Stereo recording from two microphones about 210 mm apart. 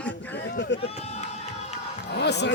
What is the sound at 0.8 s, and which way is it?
Sheep, 30° left (ahead or behind).